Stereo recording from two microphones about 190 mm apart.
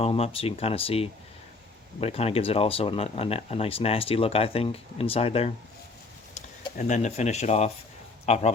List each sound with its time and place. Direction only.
0.0 s speech: 30° left (ahead or behind)
6.7 s speech: 40° left (ahead or behind)